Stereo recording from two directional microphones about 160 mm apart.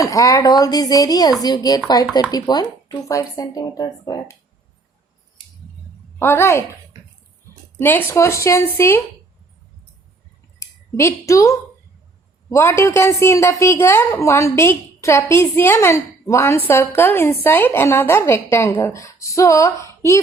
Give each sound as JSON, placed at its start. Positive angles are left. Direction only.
{"t": 0.0, "sound": "speech", "side_deg": 20}
{"t": 6.1, "sound": "a woman's voice", "side_deg": 15}
{"t": 7.8, "sound": "a woman's voice", "side_deg": 15}
{"t": 10.6, "sound": "a woman's voice", "side_deg": 20}